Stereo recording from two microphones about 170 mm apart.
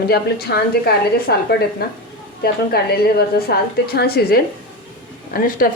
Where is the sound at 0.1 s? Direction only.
70° left (ahead or behind).